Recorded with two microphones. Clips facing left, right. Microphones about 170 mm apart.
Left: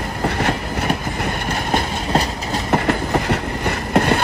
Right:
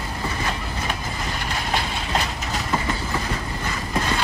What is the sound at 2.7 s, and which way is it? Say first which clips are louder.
Train: left 8 dB; 70° left (ahead or behind).